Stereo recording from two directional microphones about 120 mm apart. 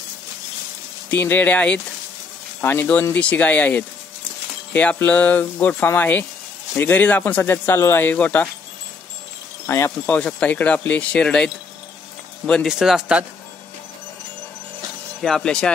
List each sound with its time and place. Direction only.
1.1 s speech: 15° left (ahead or behind)
9.7 s speech: 20° left (ahead or behind)
10.0 s speech: 10° left (ahead or behind)
15.2 s speech: 5° left (ahead or behind)